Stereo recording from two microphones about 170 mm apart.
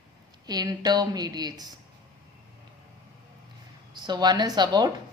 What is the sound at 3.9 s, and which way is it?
Speech, 25° right (ahead or behind).